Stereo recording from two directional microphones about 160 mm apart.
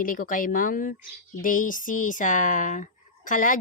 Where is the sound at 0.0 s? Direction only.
60° left (ahead or behind).